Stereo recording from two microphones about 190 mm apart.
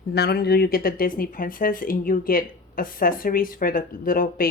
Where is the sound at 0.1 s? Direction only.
55° left (ahead or behind).